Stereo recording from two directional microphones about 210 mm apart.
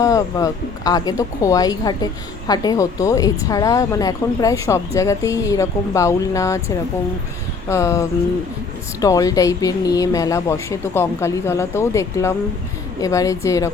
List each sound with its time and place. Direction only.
0.0 s speech: 15° left (ahead or behind)